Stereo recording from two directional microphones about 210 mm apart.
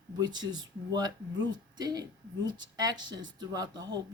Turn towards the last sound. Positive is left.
turn(degrees=-20)  # may be behind; listen again after turning